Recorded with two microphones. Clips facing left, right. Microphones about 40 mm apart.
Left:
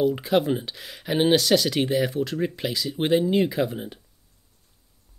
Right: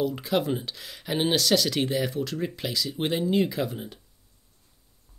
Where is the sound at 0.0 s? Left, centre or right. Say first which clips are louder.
Left 4 dB; centre.